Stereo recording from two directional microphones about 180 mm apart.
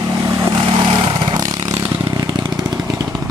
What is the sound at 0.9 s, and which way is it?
Vehicle, 25° right (ahead or behind).